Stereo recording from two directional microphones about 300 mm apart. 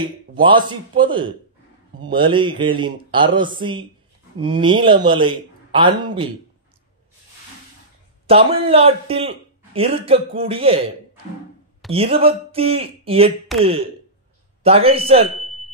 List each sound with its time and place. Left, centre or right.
0.0 s a man's voice: centre
8.3 s speech: centre
11.9 s speech: centre
15.3 s a sound: centre